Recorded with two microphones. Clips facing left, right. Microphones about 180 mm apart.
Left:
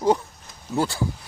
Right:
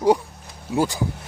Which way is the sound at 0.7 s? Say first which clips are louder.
Right 2 dB; 15° right (ahead or behind).